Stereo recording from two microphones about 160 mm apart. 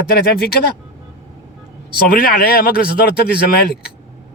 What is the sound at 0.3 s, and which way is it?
Speech, 70° left (ahead or behind).